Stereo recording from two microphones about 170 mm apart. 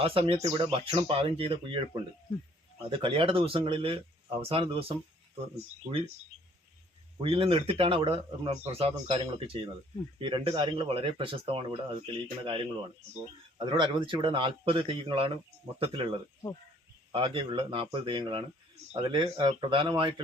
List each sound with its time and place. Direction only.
0.0 s speech: 35° right (ahead or behind)
7.2 s speech: 30° right (ahead or behind)
13.7 s a man's voice: 25° right (ahead or behind)